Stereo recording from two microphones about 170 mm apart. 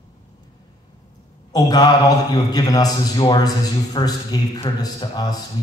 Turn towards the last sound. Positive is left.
turn(degrees=25)  # may be behind; listen again after turning